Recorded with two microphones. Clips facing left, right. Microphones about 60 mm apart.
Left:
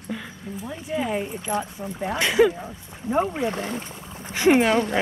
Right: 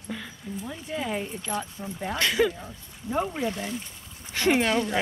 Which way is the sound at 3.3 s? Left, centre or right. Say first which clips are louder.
Left 3 dB; left.